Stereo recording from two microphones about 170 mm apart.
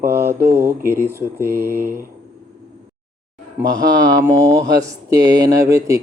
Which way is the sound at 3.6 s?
10° right (ahead or behind).